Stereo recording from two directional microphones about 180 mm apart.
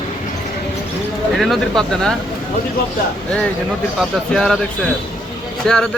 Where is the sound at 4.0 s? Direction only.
Centre (ahead or behind).